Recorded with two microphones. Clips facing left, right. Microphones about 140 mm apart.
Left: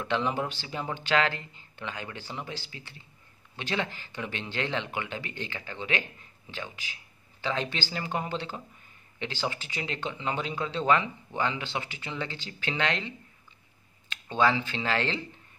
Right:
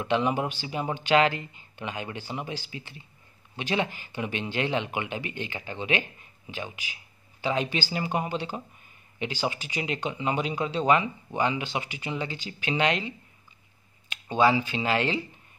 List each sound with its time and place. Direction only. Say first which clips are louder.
0.0 s speech: right 3 dB; 15° right (ahead or behind)